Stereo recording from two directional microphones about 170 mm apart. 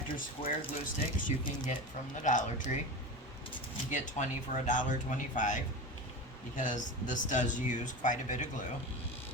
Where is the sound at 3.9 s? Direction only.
45° left (ahead or behind).